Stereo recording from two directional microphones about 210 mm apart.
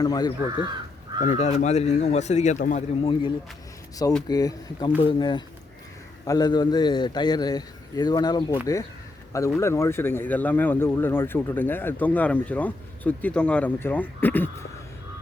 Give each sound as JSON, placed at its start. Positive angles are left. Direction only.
{"t": 0.0, "sound": "a man's voice", "side_deg": 20}
{"t": 1.2, "sound": "a man's voice", "side_deg": 35}
{"t": 9.6, "sound": "speech", "side_deg": 15}